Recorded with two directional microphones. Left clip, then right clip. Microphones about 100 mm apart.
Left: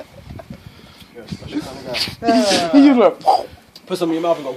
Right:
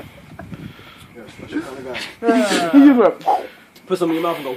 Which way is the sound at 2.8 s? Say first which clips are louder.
Left 1 dB; 70° left (ahead or behind).